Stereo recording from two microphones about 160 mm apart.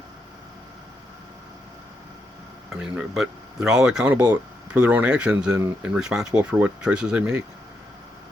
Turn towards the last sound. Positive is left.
turn(degrees=-5)  # may be behind; listen again after turning